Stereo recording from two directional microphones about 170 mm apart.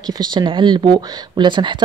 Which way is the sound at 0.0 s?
25° right (ahead or behind).